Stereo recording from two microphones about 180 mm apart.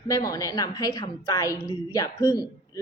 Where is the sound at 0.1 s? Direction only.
20° left (ahead or behind).